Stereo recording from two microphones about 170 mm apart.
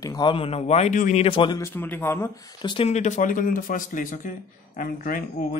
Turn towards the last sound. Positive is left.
turn(degrees=55)  # may be behind; listen again after turning